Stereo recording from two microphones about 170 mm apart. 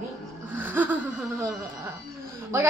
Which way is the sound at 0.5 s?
10° right (ahead or behind).